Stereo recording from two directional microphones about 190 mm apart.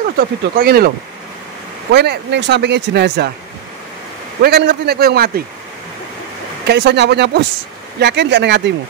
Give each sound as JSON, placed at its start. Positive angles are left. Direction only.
{"t": 0.0, "sound": "speech", "side_deg": -50}
{"t": 4.4, "sound": "speech", "side_deg": -60}
{"t": 6.7, "sound": "speech", "side_deg": -65}